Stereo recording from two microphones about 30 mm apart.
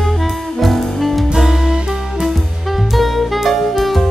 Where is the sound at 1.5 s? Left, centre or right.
Centre.